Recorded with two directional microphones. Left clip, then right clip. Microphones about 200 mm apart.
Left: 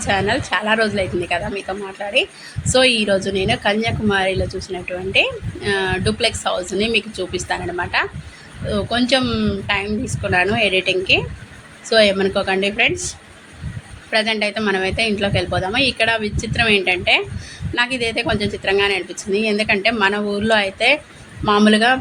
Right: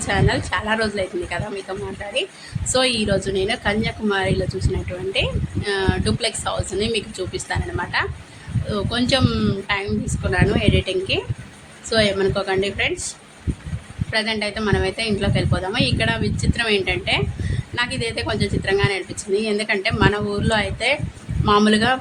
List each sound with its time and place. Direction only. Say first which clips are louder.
0.1 s a woman's voice: left 3 dB; 10° left (ahead or behind)
2.7 s a woman's voice: left 4 dB; 10° left (ahead or behind)
14.1 s a woman's voice: left 4 dB; 10° left (ahead or behind)